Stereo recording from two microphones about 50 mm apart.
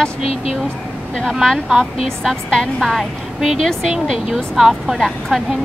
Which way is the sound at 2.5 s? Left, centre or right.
Centre.